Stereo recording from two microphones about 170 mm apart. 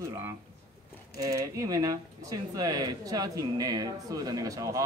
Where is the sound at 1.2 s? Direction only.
20° right (ahead or behind).